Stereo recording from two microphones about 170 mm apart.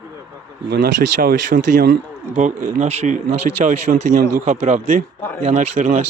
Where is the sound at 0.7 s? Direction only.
75° right (ahead or behind).